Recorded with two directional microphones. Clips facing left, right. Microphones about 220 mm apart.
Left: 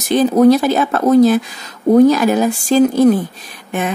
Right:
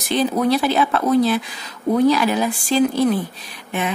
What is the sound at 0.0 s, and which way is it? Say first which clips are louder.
Speech: left 8 dB; 45° left (ahead or behind).